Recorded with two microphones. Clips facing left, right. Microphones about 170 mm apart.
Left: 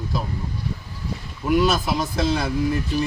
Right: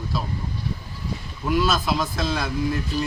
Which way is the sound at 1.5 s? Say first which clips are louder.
Left 2 dB; 15° left (ahead or behind).